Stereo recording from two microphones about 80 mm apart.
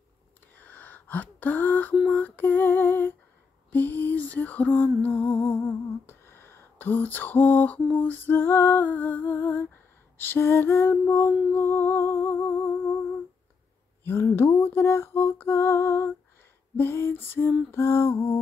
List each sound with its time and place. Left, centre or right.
0.6 s gasp: left
2.1 s lullaby: left
3.7 s music: left
10.1 s lullaby: left
11.5 s humming: left
14.0 s music: left
16.7 s lullaby: left
17.6 s music: left